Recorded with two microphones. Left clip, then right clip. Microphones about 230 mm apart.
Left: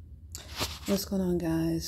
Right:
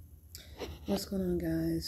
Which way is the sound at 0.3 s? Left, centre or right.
Centre.